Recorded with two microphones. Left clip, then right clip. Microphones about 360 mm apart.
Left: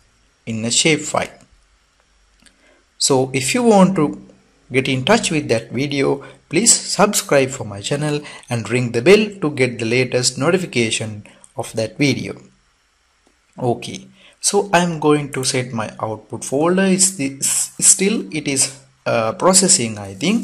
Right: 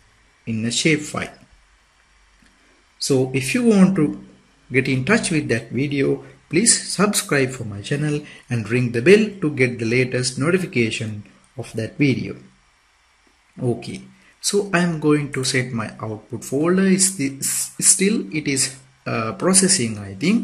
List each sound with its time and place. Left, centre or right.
0.7 s speech: centre
3.0 s speech: centre
11.0 s speech: left
13.7 s speech: centre